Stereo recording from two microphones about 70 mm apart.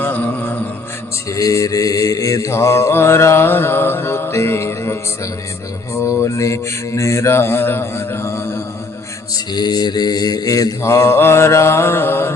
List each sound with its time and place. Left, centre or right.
0.0 s mantra: left
1.3 s mantra: left
9.3 s mantra: left